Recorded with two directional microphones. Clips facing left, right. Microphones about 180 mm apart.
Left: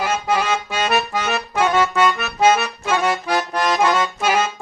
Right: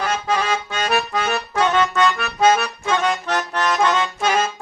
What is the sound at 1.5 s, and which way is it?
Accordion, 10° left (ahead or behind).